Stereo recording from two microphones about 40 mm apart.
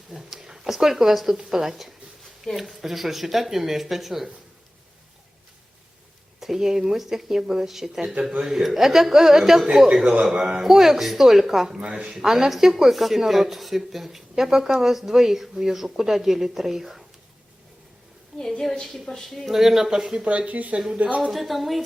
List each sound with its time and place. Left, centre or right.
0.1 s speech: centre
6.4 s speech: centre
12.0 s speech: centre
18.3 s a woman's voice: centre
19.5 s speech: centre
20.2 s speech: right
21.2 s speech: centre